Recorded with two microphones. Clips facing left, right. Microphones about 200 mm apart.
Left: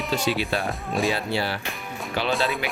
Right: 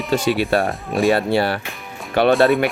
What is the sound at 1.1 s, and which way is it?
Speech, 55° right (ahead or behind).